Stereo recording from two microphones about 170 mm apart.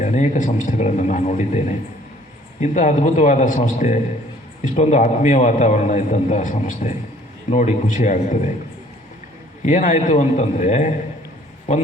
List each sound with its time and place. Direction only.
0.0 s a man's voice: 45° left (ahead or behind)
9.6 s a man's voice: 45° left (ahead or behind)